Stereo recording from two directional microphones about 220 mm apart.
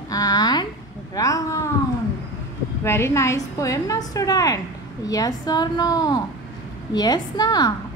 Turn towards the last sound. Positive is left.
turn(degrees=15)  # may be behind; listen again after turning